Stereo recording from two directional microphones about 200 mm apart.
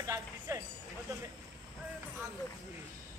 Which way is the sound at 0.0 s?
15° right (ahead or behind).